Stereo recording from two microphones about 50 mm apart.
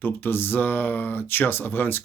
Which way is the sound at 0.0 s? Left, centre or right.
Left.